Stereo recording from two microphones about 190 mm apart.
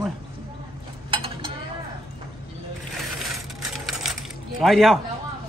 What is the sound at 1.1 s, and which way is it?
Dishes, 25° right (ahead or behind).